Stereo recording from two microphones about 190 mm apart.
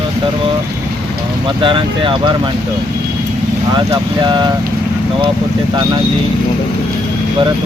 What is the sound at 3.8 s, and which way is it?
Speech, 25° right (ahead or behind).